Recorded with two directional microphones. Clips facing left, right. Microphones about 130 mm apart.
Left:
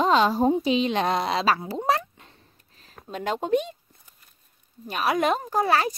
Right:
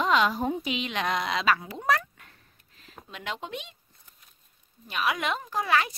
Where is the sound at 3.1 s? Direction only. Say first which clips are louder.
Left 12 dB; 40° left (ahead or behind).